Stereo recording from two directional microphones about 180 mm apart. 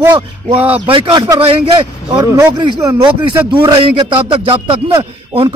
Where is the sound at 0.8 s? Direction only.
30° right (ahead or behind).